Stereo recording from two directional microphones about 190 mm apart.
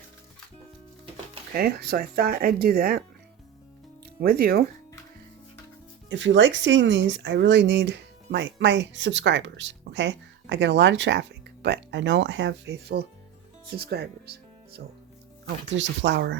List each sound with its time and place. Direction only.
1.5 s speech: 55° right (ahead or behind)
4.2 s speech: 55° right (ahead or behind)
6.1 s speech: 75° right (ahead or behind); by 14.8 s 55° right (ahead or behind)
15.7 s speech: 75° right (ahead or behind)